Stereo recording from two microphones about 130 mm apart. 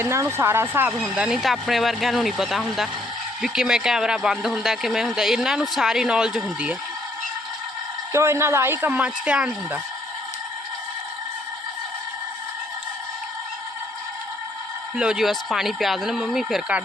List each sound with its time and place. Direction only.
0.0 s speech: 20° right (ahead or behind)
0.9 s a man's voice: 5° right (ahead or behind)
8.1 s speech: 20° right (ahead or behind)
14.9 s a man's voice: 5° right (ahead or behind)